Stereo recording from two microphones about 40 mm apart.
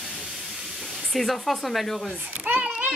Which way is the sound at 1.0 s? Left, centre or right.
Centre.